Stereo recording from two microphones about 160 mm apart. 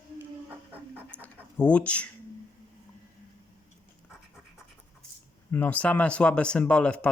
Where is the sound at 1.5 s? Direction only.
10° left (ahead or behind).